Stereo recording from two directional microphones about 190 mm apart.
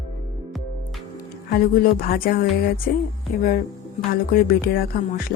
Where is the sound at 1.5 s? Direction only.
50° left (ahead or behind).